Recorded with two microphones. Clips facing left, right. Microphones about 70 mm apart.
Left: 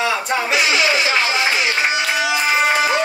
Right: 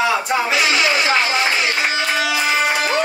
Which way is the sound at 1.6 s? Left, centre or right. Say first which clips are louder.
Left 1 dB; centre.